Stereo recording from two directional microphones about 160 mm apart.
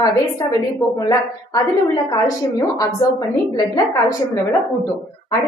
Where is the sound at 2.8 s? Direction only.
20° left (ahead or behind).